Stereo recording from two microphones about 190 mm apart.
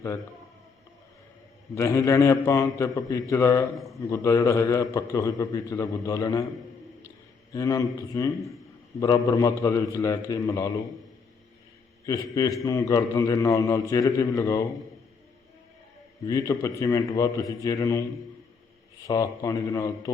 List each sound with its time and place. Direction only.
1.7 s a man's voice: 15° left (ahead or behind)
7.5 s a man's voice: 20° left (ahead or behind)
12.0 s a man's voice: 20° left (ahead or behind)
16.2 s a man's voice: 15° left (ahead or behind)
19.0 s a man's voice: 20° left (ahead or behind)